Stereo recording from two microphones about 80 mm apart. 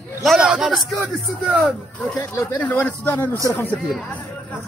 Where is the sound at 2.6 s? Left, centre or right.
Left.